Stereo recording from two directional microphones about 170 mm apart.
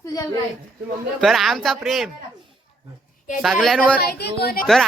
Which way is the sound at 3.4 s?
Centre (ahead or behind).